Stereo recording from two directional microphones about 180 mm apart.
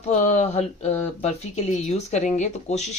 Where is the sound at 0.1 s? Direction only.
40° left (ahead or behind).